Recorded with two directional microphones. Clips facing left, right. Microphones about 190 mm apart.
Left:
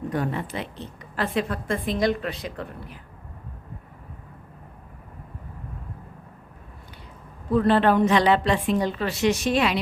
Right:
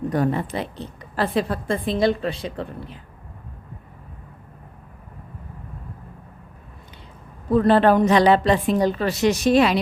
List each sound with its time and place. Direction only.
0.1 s a woman's voice: 40° right (ahead or behind)
7.6 s a woman's voice: 40° right (ahead or behind)